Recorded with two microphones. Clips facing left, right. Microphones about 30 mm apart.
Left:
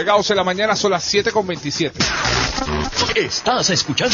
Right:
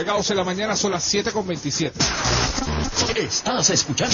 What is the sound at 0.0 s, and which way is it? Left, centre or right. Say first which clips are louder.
Speech: left 6 dB; left.